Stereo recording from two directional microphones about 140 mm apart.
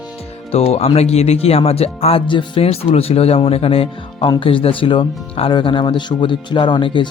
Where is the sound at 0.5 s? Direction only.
45° left (ahead or behind).